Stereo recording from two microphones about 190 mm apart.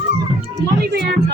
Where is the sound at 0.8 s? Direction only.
55° right (ahead or behind).